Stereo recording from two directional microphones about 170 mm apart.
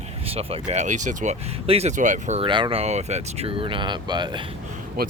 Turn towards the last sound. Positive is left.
turn(degrees=-60)  # may be behind; listen again after turning